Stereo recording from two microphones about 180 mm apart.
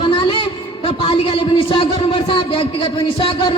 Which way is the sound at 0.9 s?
30° left (ahead or behind).